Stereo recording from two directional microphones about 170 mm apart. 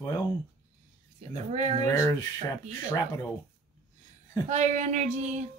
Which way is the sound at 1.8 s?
20° left (ahead or behind).